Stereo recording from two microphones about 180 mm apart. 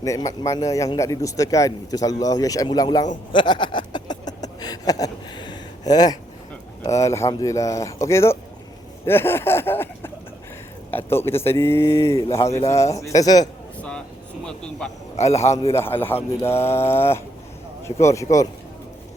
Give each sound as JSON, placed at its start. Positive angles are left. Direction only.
{"t": 0.0, "sound": "speech", "side_deg": 20}
{"t": 3.3, "sound": "a sound", "side_deg": 25}
{"t": 6.9, "sound": "speech", "side_deg": 15}
{"t": 12.5, "sound": "a man's voice", "side_deg": 35}
{"t": 12.7, "sound": "speech", "side_deg": 15}
{"t": 14.4, "sound": "speech", "side_deg": 5}
{"t": 15.1, "sound": "a man's voice", "side_deg": 35}
{"t": 15.8, "sound": "speech", "side_deg": 10}